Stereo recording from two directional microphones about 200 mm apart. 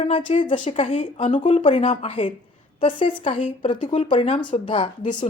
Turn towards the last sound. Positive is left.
turn(degrees=25)  # may be behind; listen again after turning